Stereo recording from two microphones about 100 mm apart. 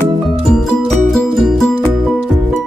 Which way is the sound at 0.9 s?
5° left (ahead or behind).